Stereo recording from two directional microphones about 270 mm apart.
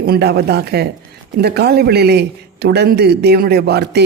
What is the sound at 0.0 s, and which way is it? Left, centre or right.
A man's voice, right.